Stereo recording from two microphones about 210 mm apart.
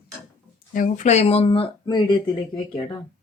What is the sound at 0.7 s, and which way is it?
Speech, 40° left (ahead or behind).